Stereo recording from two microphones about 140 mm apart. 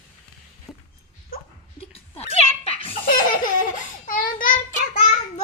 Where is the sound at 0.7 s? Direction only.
Centre (ahead or behind).